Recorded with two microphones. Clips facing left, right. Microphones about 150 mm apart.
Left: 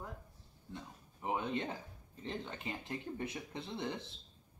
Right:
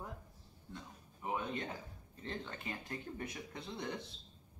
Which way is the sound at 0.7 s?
20° left (ahead or behind).